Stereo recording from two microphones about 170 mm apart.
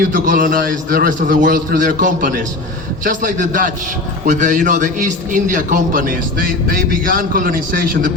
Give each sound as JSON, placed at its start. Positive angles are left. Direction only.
{"t": 0.1, "sound": "a man's voice", "side_deg": -50}